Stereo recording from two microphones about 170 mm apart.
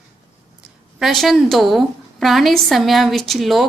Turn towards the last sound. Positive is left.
turn(degrees=0)  # may be behind; listen again after turning